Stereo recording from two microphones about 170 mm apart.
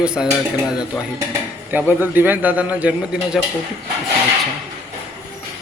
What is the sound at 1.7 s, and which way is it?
A man's voice, 10° right (ahead or behind).